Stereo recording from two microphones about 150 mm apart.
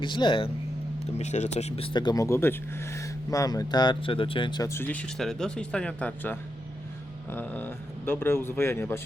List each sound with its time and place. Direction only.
0.0 s speech: 30° left (ahead or behind)
1.2 s speech: 50° left (ahead or behind); by 4.7 s 30° left (ahead or behind)
4.7 s speech: 10° left (ahead or behind)